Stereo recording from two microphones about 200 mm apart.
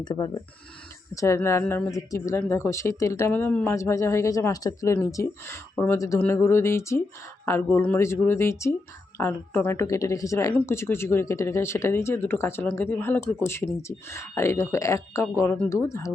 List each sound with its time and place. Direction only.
0.0 s speech: 20° left (ahead or behind)